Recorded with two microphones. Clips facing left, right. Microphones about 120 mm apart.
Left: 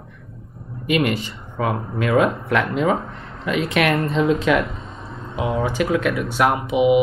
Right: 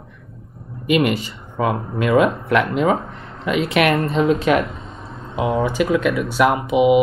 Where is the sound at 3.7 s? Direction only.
10° right (ahead or behind).